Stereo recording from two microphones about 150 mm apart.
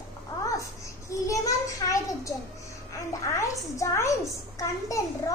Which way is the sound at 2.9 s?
20° left (ahead or behind).